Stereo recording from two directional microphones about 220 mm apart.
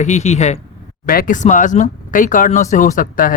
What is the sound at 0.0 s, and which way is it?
Speech, 30° left (ahead or behind).